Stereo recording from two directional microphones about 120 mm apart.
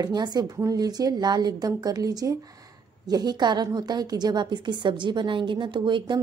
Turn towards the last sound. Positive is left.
turn(degrees=-40)  # may be behind; listen again after turning